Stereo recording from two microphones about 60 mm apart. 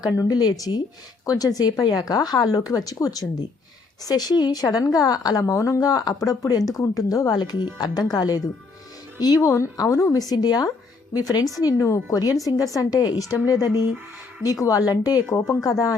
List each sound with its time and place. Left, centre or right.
0.0 s a woman's voice: left
9.7 s a woman's voice: left
11.5 s a woman's voice: left
12.5 s a woman's voice: left
15.4 s speech: left